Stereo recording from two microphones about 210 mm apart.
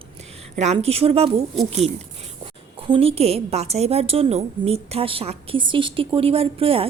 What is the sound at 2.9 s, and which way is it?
A woman's voice, 25° right (ahead or behind).